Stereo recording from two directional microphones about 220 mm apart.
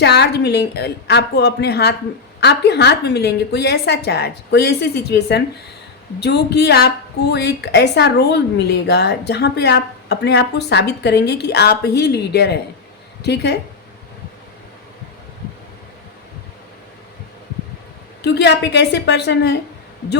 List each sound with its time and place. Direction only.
0.0 s a woman's voice: 50° left (ahead or behind)
18.2 s a woman's voice: 50° left (ahead or behind)